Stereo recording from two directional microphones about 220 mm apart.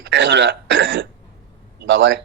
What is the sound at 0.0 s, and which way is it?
A man's voice, 55° right (ahead or behind).